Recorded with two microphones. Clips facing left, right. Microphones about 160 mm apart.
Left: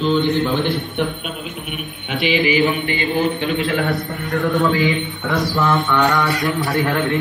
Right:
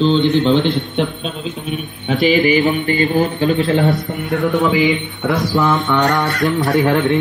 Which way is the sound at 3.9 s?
20° right (ahead or behind).